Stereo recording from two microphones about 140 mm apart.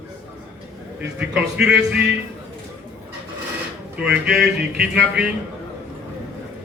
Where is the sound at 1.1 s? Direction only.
5° right (ahead or behind).